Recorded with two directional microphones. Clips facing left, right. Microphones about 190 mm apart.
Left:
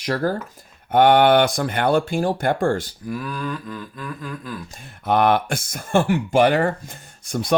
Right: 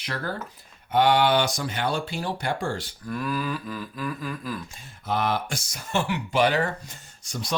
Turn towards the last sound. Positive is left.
turn(degrees=55)  # may be behind; listen again after turning